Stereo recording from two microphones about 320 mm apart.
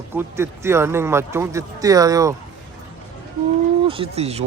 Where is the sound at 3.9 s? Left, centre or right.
Centre.